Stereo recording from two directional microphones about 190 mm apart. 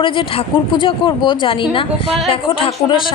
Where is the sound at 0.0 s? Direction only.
25° left (ahead or behind).